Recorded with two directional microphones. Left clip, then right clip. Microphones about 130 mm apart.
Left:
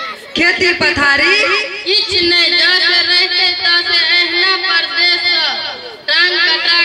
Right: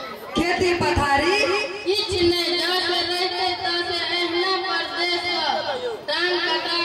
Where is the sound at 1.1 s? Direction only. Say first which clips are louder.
Left 8 dB; 10° left (ahead or behind).